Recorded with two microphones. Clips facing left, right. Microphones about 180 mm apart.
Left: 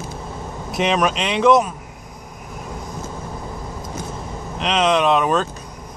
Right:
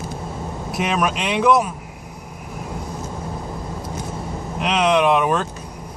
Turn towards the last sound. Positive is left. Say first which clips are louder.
# even
turn(degrees=-10)  # may be behind; listen again after turning